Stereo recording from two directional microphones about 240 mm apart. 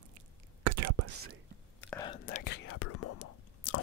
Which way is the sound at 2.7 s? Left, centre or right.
Left.